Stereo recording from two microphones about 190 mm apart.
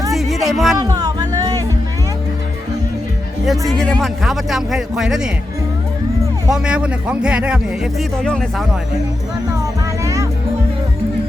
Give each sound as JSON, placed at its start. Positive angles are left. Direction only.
{"t": 0.1, "sound": "music", "side_deg": 0}
{"t": 0.5, "sound": "speech", "side_deg": 0}
{"t": 0.8, "sound": "music", "side_deg": -20}
{"t": 3.7, "sound": "speech", "side_deg": 5}
{"t": 6.5, "sound": "speech", "side_deg": -5}
{"t": 10.0, "sound": "music", "side_deg": -15}